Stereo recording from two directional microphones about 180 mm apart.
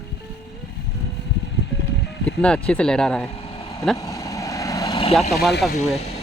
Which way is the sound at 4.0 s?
15° left (ahead or behind).